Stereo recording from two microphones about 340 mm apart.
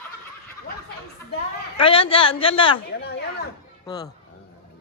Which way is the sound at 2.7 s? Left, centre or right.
Left.